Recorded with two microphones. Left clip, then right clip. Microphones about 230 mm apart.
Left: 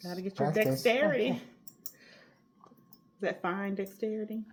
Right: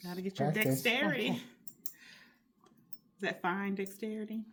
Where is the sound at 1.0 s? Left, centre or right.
Right.